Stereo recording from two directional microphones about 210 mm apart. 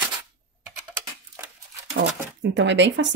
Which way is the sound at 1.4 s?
10° right (ahead or behind).